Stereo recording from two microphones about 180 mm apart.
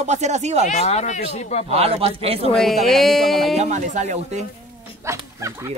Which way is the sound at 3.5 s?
40° right (ahead or behind).